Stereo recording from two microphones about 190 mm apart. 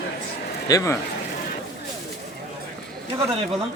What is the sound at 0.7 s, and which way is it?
Speech, 20° left (ahead or behind).